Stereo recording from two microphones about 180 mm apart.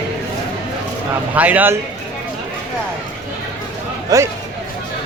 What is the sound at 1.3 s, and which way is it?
Speech, 10° right (ahead or behind).